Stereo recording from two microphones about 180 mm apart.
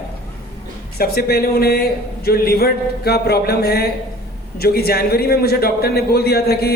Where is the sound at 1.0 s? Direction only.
60° left (ahead or behind).